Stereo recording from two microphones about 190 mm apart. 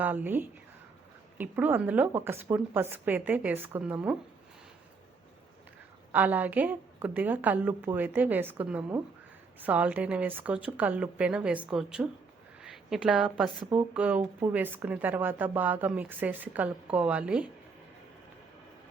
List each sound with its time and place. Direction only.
0.0 s speech: 10° right (ahead or behind)
6.1 s speech: 10° right (ahead or behind)